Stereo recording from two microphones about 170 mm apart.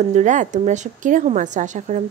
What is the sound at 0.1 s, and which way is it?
A woman's voice, 45° right (ahead or behind).